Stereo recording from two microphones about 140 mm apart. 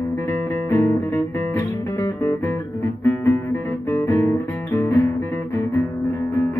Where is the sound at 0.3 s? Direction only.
15° left (ahead or behind).